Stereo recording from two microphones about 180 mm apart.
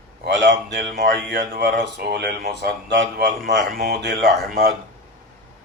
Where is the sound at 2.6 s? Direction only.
75° right (ahead or behind).